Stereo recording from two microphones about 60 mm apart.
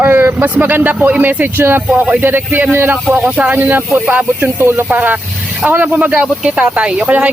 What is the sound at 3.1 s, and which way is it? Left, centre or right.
A man's voice, right.